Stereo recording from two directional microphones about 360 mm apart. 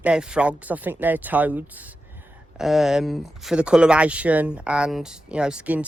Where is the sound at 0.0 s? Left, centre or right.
Centre.